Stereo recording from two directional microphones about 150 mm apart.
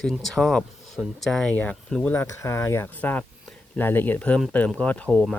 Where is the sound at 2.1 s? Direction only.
20° left (ahead or behind).